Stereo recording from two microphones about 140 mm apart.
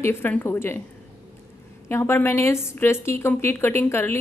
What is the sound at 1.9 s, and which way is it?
A woman's voice, 15° left (ahead or behind).